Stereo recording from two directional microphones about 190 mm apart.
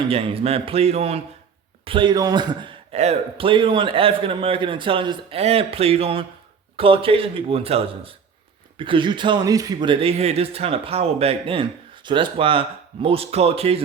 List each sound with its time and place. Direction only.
0.1 s a man's voice: 30° right (ahead or behind)